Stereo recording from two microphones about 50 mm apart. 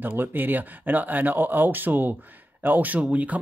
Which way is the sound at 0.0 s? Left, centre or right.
Right.